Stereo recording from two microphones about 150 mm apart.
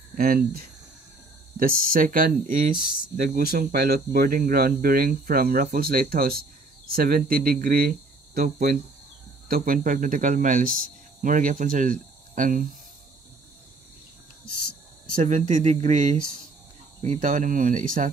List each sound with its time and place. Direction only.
0.1 s speech: 75° right (ahead or behind)
1.6 s speech: 75° right (ahead or behind)
2.9 s speech: 90° right; by 12.6 s 60° right (ahead or behind)
15.1 s speech: 55° right (ahead or behind)